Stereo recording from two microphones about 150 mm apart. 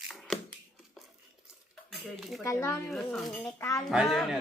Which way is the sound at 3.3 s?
15° left (ahead or behind).